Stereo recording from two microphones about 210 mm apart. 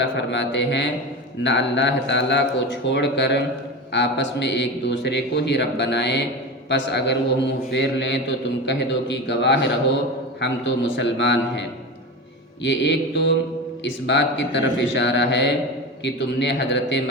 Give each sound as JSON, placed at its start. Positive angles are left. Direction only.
{"t": 0.2, "sound": "a man's voice", "side_deg": 55}
{"t": 12.6, "sound": "a man's voice", "side_deg": 55}